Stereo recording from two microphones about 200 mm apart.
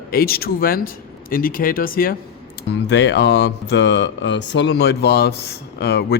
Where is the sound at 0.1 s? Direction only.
50° left (ahead or behind).